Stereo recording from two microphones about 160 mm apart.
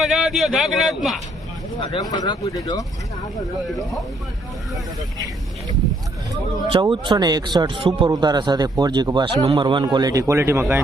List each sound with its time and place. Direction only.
0.0 s speech: 5° right (ahead or behind)
1.9 s speech: 25° left (ahead or behind)
3.7 s speech: centre (ahead or behind)
6.7 s speech: 30° right (ahead or behind); by 10.8 s 15° right (ahead or behind)